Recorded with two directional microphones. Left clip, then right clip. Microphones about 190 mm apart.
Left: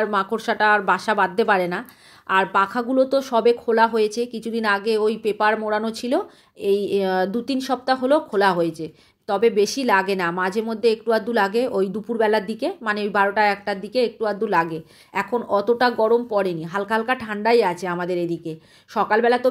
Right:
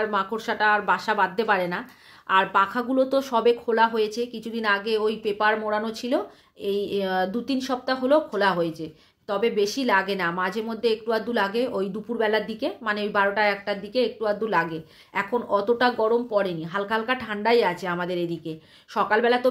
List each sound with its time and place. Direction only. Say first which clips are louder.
0.0 s speech: left 4 dB; 40° left (ahead or behind)